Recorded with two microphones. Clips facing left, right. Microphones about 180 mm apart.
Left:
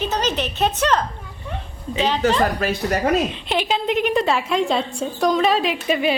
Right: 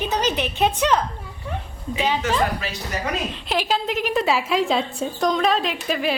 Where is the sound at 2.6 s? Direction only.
55° left (ahead or behind).